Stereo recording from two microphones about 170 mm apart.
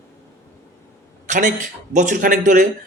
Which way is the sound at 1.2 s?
45° right (ahead or behind).